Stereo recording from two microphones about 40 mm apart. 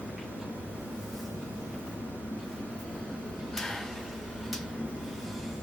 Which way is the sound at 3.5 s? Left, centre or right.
Centre.